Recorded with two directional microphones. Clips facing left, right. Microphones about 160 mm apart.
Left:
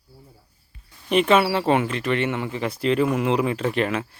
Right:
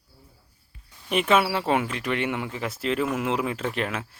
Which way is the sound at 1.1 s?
5° right (ahead or behind).